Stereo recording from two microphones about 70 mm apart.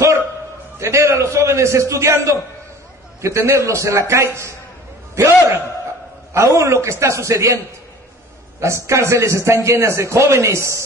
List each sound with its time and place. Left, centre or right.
0.7 s a man's voice: right